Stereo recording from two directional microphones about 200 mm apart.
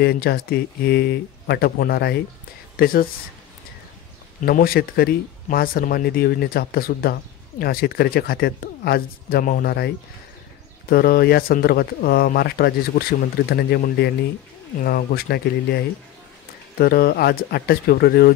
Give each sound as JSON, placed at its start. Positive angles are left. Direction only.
{"t": 0.0, "sound": "speech", "side_deg": 50}
{"t": 4.5, "sound": "speech", "side_deg": 45}